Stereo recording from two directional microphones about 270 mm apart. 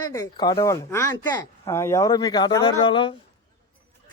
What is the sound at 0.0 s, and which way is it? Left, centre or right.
Speech, centre.